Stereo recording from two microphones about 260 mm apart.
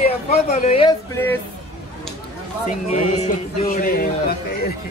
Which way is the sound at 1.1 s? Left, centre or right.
Centre.